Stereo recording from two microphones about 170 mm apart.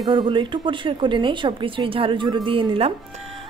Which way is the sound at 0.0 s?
30° right (ahead or behind).